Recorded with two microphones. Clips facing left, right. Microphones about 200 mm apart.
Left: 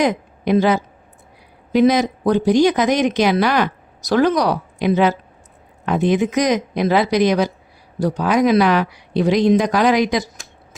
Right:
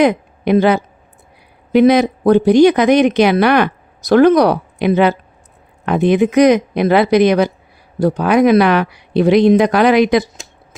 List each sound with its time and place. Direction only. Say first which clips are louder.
0.0 s a woman's voice: right 5 dB; 60° right (ahead or behind)